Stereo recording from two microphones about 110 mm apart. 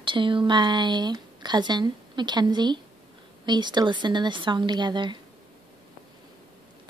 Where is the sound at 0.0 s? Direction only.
50° right (ahead or behind).